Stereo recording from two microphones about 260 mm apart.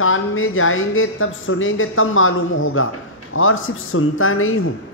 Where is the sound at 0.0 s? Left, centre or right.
Left.